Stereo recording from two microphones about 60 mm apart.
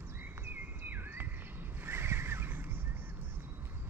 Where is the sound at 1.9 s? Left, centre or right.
Right.